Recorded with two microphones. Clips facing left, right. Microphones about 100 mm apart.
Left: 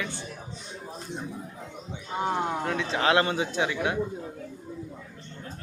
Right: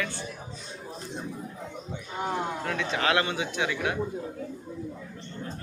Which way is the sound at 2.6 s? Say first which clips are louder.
Left 1 dB; 25° left (ahead or behind).